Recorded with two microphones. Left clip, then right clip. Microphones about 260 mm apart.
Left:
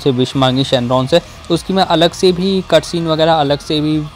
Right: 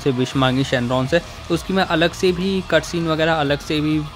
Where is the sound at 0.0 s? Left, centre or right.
Centre.